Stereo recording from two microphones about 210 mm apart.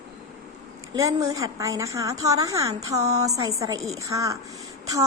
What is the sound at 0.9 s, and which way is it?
A woman's voice, 15° right (ahead or behind).